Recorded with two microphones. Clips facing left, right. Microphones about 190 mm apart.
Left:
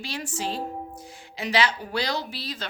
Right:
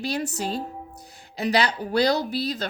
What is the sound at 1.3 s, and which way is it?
A woman's voice, 40° right (ahead or behind).